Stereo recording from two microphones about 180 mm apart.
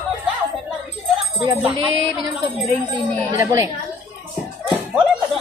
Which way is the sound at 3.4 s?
15° right (ahead or behind).